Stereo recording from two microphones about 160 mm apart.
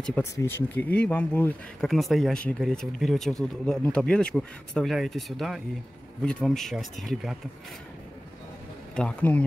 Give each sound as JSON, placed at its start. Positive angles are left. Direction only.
{"t": 0.0, "sound": "speech", "side_deg": 10}
{"t": 8.9, "sound": "speech", "side_deg": 10}